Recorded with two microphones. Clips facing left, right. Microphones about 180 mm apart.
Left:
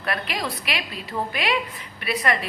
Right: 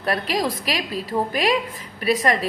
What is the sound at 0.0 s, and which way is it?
A woman's voice, 35° right (ahead or behind).